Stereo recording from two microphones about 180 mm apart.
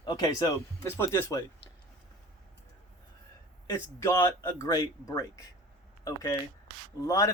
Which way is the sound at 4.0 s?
15° left (ahead or behind).